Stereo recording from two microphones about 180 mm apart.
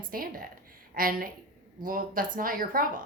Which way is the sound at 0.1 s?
55° right (ahead or behind).